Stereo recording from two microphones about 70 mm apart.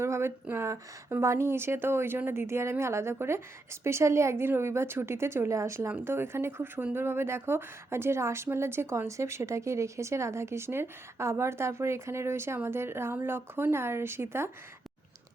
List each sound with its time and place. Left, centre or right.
0.0 s a woman's voice: right